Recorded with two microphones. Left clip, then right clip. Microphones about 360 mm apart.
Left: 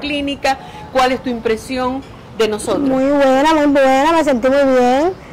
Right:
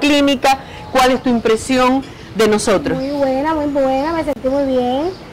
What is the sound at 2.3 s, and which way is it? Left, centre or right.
Speech, right.